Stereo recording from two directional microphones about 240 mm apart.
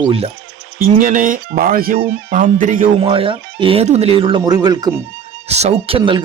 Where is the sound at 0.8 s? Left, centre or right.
Right.